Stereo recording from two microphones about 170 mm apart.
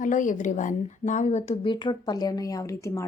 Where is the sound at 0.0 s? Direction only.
50° left (ahead or behind).